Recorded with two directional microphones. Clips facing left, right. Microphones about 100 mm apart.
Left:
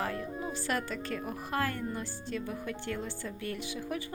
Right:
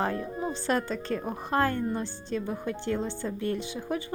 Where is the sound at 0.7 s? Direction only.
30° right (ahead or behind).